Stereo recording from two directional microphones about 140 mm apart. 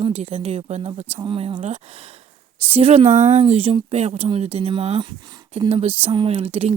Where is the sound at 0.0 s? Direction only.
45° right (ahead or behind).